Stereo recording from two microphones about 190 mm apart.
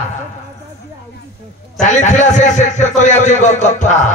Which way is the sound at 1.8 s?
40° left (ahead or behind).